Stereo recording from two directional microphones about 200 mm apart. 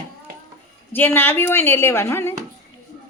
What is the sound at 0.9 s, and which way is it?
A woman's voice, 10° left (ahead or behind).